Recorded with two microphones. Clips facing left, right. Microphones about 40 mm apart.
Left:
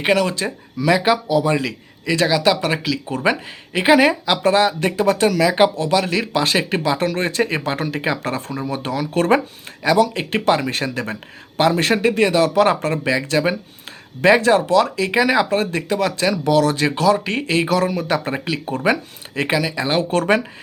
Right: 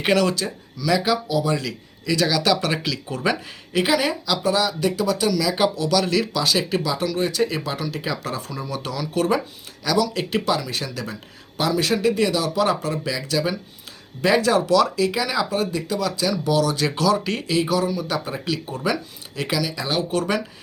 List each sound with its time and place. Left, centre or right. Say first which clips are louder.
0.0 s speech: left 2 dB; centre
0.3 s speech: left 4 dB; left; by 2.8 s centre
3.1 s speech: left 3 dB; left
16.7 s speech: left 4 dB; left
17.4 s speech: left 5 dB; left